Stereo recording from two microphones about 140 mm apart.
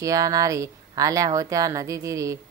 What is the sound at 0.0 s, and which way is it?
Speech, 25° right (ahead or behind).